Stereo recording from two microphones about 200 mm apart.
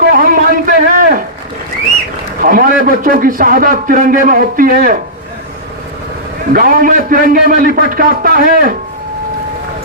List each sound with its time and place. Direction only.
0.0 s a sound: 45° right (ahead or behind)
2.4 s a man's voice: 45° right (ahead or behind)
6.5 s a man's voice: 45° right (ahead or behind)